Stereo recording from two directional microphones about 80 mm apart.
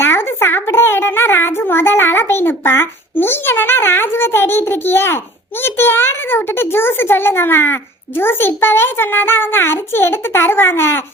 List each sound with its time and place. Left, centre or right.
0.0 s a child's voice: left